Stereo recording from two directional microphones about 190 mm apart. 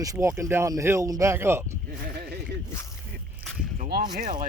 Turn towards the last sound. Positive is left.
turn(degrees=-45)  # may be behind; listen again after turning